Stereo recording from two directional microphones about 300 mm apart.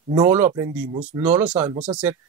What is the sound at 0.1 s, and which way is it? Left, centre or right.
Speech, centre.